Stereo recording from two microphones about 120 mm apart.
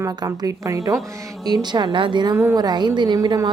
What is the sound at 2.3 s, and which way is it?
A woman's voice, 25° right (ahead or behind).